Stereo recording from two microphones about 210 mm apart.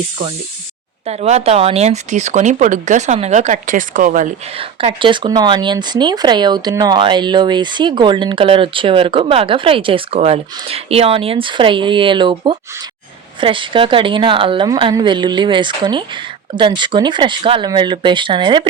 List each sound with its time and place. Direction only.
1.0 s speech: 30° right (ahead or behind)
4.5 s speech: 25° right (ahead or behind)